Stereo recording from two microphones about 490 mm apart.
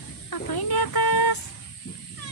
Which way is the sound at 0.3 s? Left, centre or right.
Left.